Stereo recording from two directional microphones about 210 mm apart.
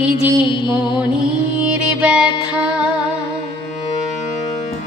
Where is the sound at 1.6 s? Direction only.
5° right (ahead or behind).